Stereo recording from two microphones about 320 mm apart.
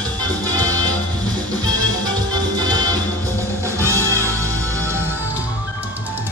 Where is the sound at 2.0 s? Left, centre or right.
Centre.